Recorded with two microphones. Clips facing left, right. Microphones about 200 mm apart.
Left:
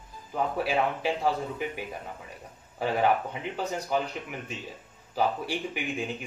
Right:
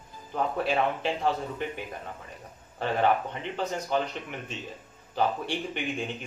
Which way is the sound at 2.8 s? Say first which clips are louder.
Even; 10° left (ahead or behind).